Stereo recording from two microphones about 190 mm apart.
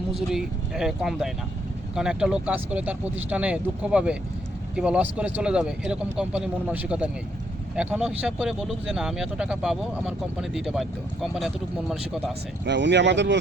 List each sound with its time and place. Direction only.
0.1 s speech: centre (ahead or behind)
12.6 s speech: 65° right (ahead or behind)